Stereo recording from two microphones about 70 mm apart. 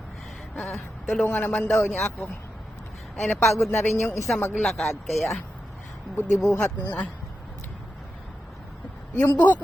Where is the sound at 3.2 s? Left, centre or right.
Centre.